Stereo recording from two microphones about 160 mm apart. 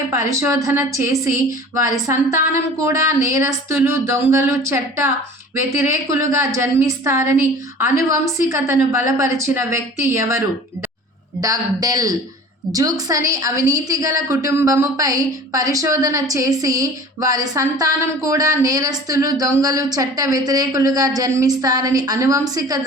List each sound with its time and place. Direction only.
0.1 s speech: 20° right (ahead or behind)